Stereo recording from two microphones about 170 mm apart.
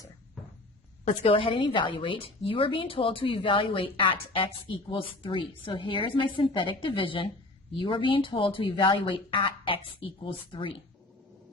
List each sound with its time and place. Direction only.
1.0 s a woman's voice: 35° left (ahead or behind)